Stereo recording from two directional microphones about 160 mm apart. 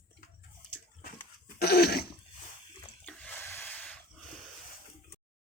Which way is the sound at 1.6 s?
80° left.